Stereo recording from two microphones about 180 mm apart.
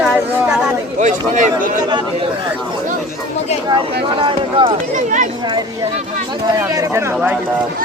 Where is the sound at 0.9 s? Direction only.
45° right (ahead or behind).